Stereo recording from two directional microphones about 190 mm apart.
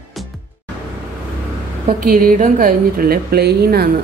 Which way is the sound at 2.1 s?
50° right (ahead or behind).